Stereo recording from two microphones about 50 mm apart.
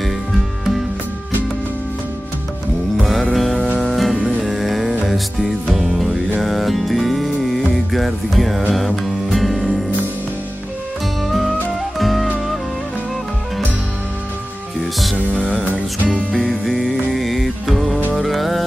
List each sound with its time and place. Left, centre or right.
3.0 s music: centre
11.2 s music: centre
15.7 s music: right
16.3 s music: centre